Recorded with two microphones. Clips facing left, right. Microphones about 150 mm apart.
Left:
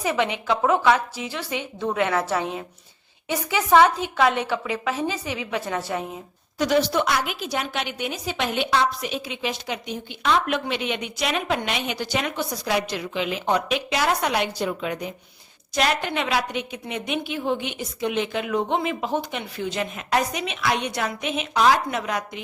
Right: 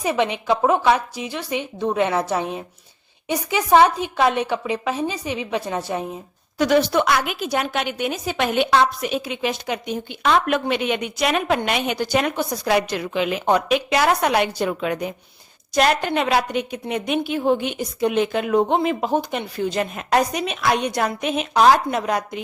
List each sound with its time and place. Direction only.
0.0 s a woman's voice: 20° right (ahead or behind)
6.6 s a woman's voice: 60° right (ahead or behind)
15.7 s a woman's voice: 45° right (ahead or behind)